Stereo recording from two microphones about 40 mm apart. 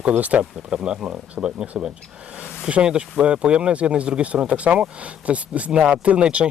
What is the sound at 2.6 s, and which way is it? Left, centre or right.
Speech, right.